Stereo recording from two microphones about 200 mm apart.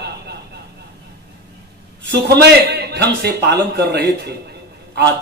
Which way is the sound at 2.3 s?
55° right (ahead or behind).